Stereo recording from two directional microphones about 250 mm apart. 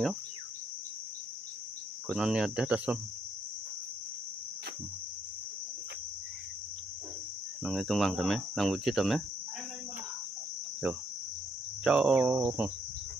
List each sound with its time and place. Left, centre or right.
2.0 s speech: centre
7.6 s speech: centre
11.8 s speech: centre